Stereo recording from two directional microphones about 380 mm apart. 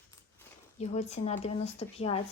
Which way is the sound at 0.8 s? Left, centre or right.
Centre.